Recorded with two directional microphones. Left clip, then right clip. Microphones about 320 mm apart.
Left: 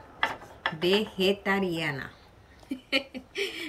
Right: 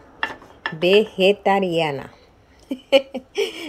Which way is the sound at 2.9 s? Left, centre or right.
Centre.